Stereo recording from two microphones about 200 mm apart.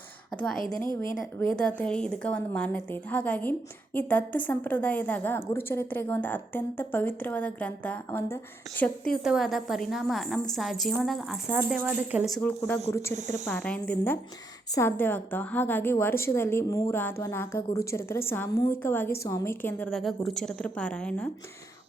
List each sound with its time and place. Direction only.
0.3 s a woman's voice: centre (ahead or behind)
13.1 s speech: 35° right (ahead or behind)
13.5 s a woman's voice: 5° left (ahead or behind)